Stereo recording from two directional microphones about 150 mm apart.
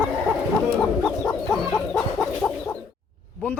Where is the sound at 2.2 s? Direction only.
15° left (ahead or behind).